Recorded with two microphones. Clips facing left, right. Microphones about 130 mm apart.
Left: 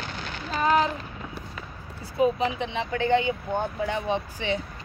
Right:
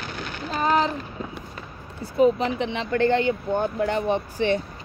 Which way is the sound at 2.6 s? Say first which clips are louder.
Right 5 dB; 70° right (ahead or behind).